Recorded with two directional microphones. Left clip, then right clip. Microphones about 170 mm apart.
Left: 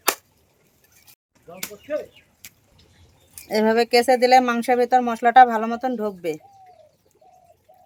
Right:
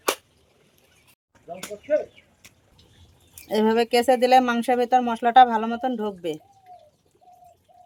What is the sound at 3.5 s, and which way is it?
Speech, 10° left (ahead or behind).